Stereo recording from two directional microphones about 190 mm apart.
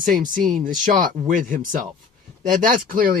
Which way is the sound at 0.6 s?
45° right (ahead or behind).